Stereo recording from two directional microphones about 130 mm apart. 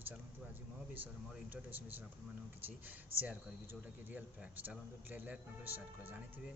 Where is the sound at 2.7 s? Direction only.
15° right (ahead or behind).